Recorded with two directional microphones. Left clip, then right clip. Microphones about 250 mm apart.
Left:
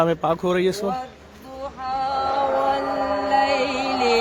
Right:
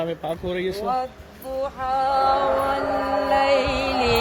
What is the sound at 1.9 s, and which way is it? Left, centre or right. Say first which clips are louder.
Music: right 3 dB; centre.